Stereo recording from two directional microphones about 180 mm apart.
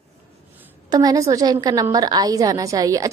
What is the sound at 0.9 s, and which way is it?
A woman's voice, 20° right (ahead or behind).